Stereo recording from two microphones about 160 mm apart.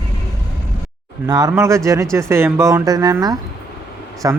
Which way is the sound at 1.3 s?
25° right (ahead or behind).